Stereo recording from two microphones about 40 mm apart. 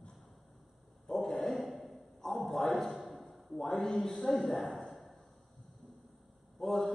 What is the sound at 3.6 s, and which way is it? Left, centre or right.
A man's voice, centre.